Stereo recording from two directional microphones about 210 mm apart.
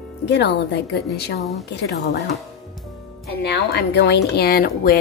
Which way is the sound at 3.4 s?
50° left (ahead or behind).